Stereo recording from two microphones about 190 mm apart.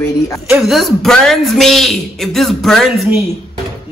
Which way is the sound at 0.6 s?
Centre (ahead or behind).